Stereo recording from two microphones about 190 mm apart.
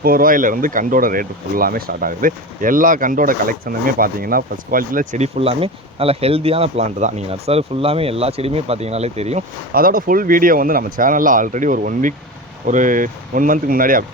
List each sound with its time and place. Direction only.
0.0 s speech: 50° right (ahead or behind); by 9.4 s 35° right (ahead or behind)
9.7 s speech: 50° right (ahead or behind)